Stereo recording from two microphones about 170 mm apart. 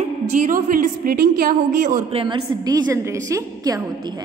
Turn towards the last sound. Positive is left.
turn(degrees=-20)  # may be behind; listen again after turning